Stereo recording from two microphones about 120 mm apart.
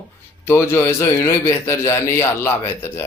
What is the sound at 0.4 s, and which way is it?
A man's voice, 20° left (ahead or behind).